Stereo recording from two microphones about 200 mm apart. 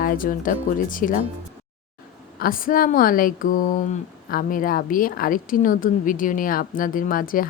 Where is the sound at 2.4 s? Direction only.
45° left (ahead or behind).